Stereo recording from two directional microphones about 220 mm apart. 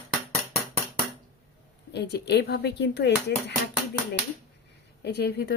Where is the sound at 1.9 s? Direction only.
50° left (ahead or behind).